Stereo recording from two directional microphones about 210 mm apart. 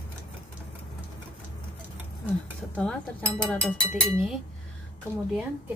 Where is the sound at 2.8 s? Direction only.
5° left (ahead or behind).